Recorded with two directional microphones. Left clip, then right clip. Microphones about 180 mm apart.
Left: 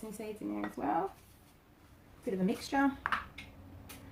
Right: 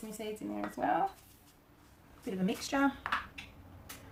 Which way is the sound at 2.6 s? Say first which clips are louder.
Right 1 dB; 25° right (ahead or behind).